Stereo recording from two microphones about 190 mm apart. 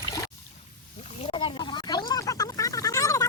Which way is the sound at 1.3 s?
25° left (ahead or behind).